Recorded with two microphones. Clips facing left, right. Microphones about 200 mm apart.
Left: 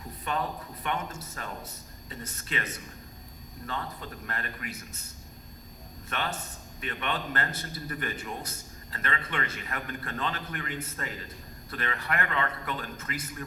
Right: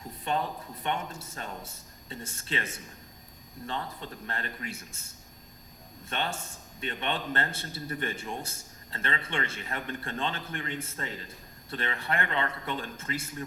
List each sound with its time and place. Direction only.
0.3 s a man's voice: 25° right (ahead or behind)
6.1 s a man's voice: 30° right (ahead or behind)